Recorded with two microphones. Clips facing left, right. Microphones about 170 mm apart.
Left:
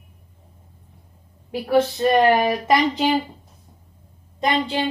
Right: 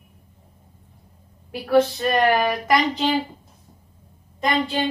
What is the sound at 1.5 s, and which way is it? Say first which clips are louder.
Speech: right 1 dB; 20° left (ahead or behind).